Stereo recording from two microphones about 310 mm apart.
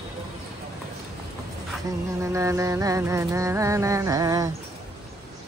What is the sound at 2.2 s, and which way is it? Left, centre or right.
Music, centre.